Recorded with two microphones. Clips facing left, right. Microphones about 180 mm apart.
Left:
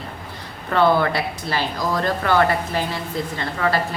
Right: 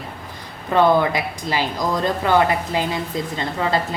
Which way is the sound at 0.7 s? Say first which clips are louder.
Right 2 dB; 15° right (ahead or behind).